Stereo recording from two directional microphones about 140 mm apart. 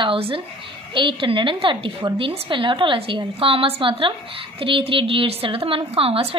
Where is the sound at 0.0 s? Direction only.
40° right (ahead or behind).